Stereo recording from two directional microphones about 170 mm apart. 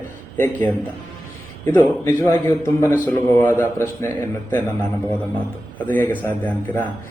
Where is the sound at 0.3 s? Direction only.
15° left (ahead or behind).